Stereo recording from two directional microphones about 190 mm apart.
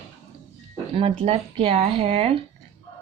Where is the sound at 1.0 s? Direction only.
30° right (ahead or behind).